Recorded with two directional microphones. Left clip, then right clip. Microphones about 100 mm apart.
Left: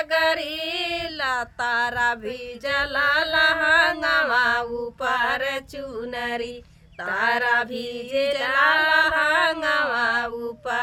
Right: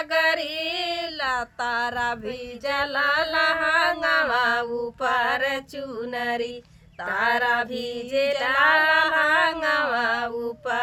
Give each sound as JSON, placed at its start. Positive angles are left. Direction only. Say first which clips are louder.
{"t": 0.0, "sound": "female singing", "louder": "left 1 dB", "side_deg": 40}
{"t": 0.5, "sound": "child singing", "louder": "even", "side_deg": 40}
{"t": 4.3, "sound": "female singing", "louder": "left 1 dB", "side_deg": 40}
{"t": 5.3, "sound": "male singing", "louder": "right 1 dB", "side_deg": -25}
{"t": 7.4, "sound": "female singing", "louder": "left 1 dB", "side_deg": 40}
{"t": 7.7, "sound": "male singing", "louder": "even", "side_deg": -25}
{"t": 8.9, "sound": "a sound", "louder": "even", "side_deg": 40}